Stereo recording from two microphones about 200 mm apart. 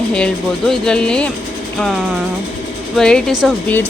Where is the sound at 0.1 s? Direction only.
5° left (ahead or behind).